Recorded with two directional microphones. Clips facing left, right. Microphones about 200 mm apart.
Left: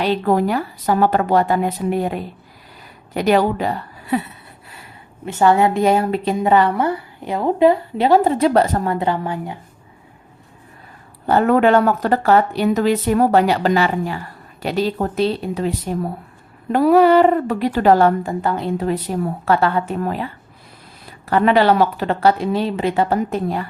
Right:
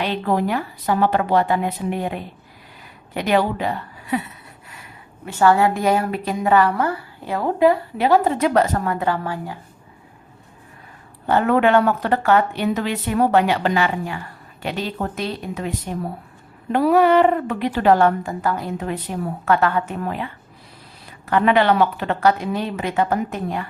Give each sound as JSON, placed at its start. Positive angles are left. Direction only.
{"t": 0.0, "sound": "speech", "side_deg": 40}
{"t": 5.2, "sound": "a woman's voice", "side_deg": 20}
{"t": 11.3, "sound": "speech", "side_deg": 40}